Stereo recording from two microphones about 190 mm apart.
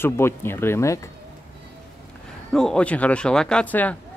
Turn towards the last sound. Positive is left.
turn(degrees=10)  # may be behind; listen again after turning